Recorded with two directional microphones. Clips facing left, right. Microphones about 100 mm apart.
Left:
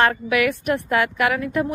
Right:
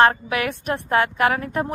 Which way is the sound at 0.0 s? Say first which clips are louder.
Right 1 dB; 30° right (ahead or behind).